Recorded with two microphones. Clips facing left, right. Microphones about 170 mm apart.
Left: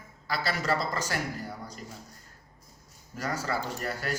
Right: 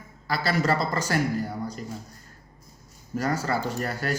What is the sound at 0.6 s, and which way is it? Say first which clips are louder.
Speech: right 4 dB; 55° right (ahead or behind).